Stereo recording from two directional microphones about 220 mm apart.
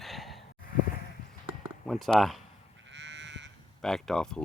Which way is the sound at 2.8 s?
55° right (ahead or behind).